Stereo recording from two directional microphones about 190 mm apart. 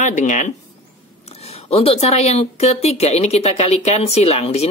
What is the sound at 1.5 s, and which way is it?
Speech, 30° left (ahead or behind).